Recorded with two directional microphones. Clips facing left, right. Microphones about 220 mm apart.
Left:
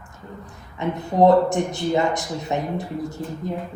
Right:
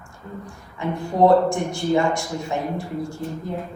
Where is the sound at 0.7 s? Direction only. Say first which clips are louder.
Left 1 dB; 20° left (ahead or behind).